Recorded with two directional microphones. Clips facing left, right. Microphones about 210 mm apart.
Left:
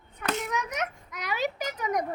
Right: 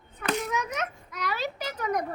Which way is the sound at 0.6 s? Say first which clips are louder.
Even; 15° left (ahead or behind).